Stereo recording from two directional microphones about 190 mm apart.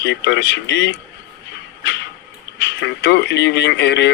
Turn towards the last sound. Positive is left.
turn(degrees=65)  # may be behind; listen again after turning